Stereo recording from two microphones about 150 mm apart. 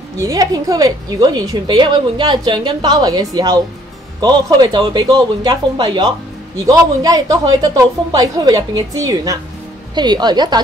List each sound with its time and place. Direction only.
0.2 s a woman's voice: 25° right (ahead or behind)